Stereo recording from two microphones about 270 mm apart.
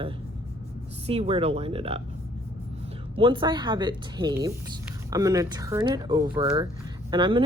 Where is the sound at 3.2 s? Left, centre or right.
Centre.